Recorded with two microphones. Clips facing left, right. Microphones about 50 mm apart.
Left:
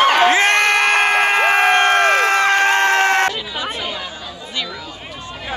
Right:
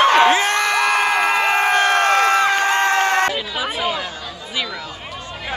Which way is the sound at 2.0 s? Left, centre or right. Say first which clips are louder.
Left 1 dB; left.